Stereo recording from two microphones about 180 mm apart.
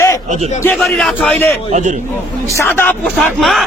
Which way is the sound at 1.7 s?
40° right (ahead or behind).